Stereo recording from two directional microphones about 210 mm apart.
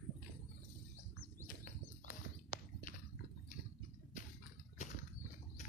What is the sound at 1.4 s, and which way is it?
Horse, 40° left (ahead or behind).